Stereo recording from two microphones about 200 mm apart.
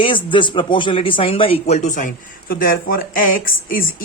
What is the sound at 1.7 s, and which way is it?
Speech, 40° left (ahead or behind).